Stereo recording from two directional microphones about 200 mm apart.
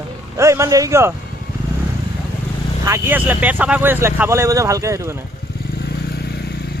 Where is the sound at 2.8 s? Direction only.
10° right (ahead or behind).